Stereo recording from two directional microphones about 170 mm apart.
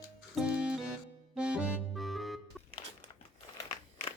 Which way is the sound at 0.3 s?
5° right (ahead or behind).